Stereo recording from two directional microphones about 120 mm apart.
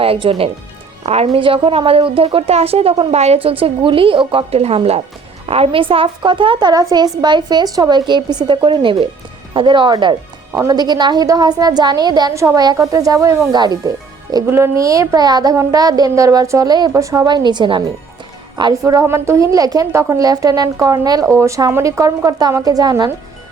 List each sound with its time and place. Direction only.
0.0 s a woman's voice: 50° right (ahead or behind); by 14.4 s 35° right (ahead or behind)
14.4 s a woman's voice: 20° right (ahead or behind)